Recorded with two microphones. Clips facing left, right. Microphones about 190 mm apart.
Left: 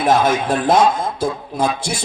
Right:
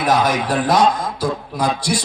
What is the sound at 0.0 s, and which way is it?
Speech, 25° left (ahead or behind).